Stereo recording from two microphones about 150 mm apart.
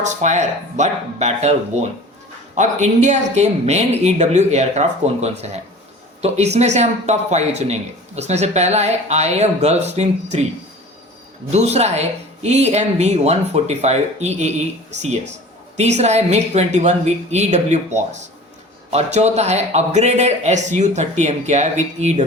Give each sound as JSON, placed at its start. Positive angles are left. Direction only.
{"t": 0.0, "sound": "speech", "side_deg": -50}
{"t": 11.5, "sound": "speech", "side_deg": -45}